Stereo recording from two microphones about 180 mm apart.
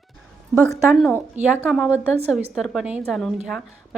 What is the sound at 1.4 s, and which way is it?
Speech, 40° right (ahead or behind).